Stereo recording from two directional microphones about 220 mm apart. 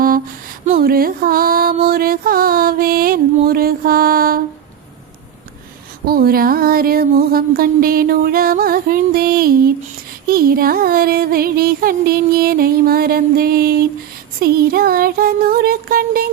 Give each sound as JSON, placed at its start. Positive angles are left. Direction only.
{"t": 0.8, "sound": "music", "side_deg": -40}
{"t": 3.4, "sound": "mantra", "side_deg": -45}
{"t": 6.1, "sound": "a sound", "side_deg": -40}
{"t": 10.2, "sound": "music", "side_deg": -40}